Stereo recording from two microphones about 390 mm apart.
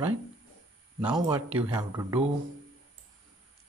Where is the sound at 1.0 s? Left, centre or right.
Centre.